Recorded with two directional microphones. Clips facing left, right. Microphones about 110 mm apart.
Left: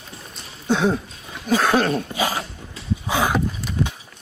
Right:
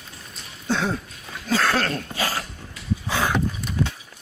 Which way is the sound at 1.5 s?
15° left (ahead or behind).